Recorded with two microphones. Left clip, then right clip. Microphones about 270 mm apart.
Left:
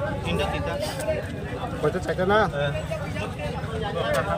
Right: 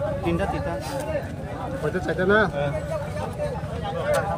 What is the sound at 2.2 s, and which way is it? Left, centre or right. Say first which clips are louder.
Speech: right 1 dB; left.